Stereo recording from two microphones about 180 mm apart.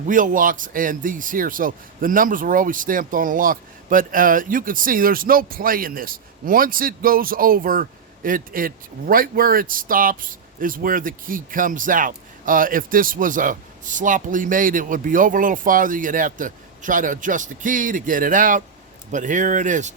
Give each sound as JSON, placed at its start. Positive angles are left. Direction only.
{"t": 0.1, "sound": "a man's voice", "side_deg": -50}